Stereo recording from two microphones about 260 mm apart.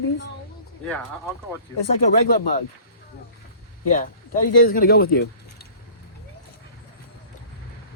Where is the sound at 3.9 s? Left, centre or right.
Left.